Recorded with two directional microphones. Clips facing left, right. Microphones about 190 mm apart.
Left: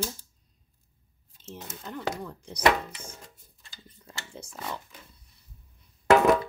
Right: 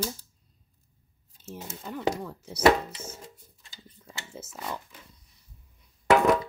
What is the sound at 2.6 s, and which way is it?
Speech, 25° right (ahead or behind).